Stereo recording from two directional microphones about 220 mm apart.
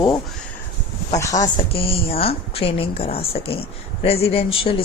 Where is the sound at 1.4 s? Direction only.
25° left (ahead or behind).